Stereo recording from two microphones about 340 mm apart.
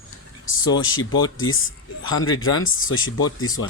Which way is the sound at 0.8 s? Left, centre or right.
Left.